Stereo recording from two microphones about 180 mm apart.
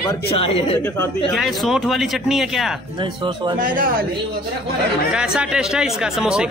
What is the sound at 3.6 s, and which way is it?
Speech, 50° right (ahead or behind).